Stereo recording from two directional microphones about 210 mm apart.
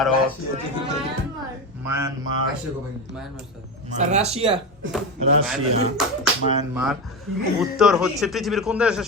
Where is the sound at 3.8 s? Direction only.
35° right (ahead or behind).